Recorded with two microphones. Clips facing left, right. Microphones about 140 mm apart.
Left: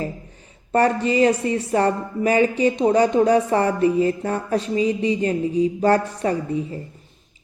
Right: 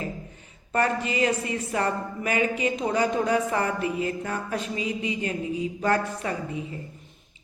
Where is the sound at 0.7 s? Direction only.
35° left (ahead or behind).